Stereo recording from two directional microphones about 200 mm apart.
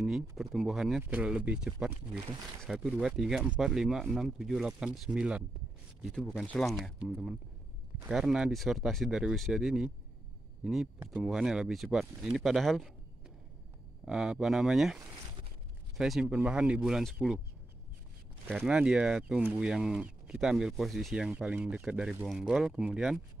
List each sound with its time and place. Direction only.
0.4 s speech: centre (ahead or behind)
14.0 s speech: 5° right (ahead or behind)
18.5 s speech: 5° right (ahead or behind)